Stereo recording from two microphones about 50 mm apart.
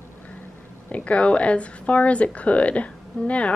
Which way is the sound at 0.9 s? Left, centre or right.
Left.